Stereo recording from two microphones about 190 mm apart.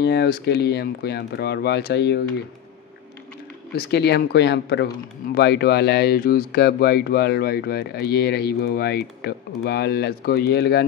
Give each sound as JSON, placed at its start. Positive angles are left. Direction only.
{"t": 0.0, "sound": "speech", "side_deg": 55}
{"t": 3.7, "sound": "speech", "side_deg": 60}